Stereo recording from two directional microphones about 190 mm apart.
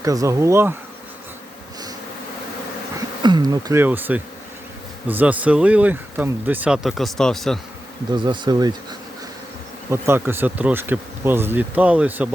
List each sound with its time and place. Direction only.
0.0 s speech: 15° right (ahead or behind)
3.2 s speech: 20° right (ahead or behind); by 7.6 s centre (ahead or behind)
8.1 s bee: 25° right (ahead or behind)
9.9 s speech: 10° right (ahead or behind)